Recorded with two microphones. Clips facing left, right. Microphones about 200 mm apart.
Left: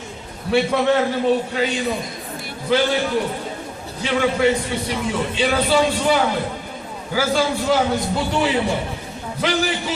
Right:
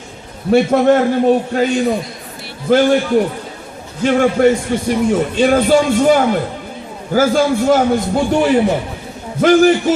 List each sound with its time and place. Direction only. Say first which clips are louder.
0.5 s a man's voice: right 6 dB; 45° right (ahead or behind)
4.0 s a man's voice: right 7 dB; 50° right (ahead or behind)